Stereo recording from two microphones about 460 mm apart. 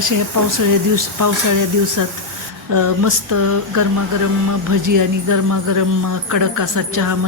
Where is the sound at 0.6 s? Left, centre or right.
Right.